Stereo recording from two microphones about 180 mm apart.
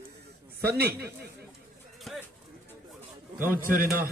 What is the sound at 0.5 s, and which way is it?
Speech, 60° right (ahead or behind).